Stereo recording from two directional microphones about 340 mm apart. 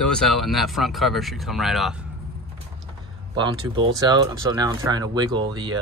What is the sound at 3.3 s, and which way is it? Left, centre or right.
Speech, centre.